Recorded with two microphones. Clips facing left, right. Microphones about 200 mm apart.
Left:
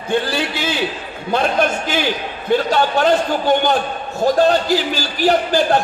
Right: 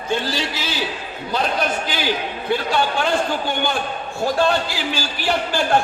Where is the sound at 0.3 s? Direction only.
55° left (ahead or behind).